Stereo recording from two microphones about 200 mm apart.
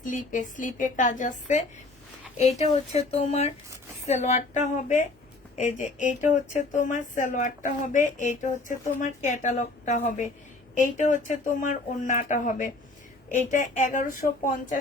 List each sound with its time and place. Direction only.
0.0 s speech: 40° left (ahead or behind)